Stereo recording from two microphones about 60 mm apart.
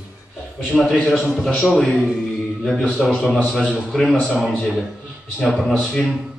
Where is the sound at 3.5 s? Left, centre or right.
Left.